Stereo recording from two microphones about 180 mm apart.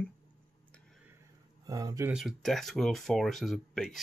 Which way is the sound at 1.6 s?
20° right (ahead or behind).